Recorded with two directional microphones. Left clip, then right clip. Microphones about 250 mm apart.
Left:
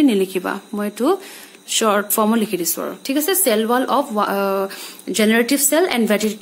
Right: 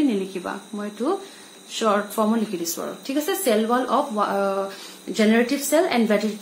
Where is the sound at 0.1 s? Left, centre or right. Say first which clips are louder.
Left 7 dB; left.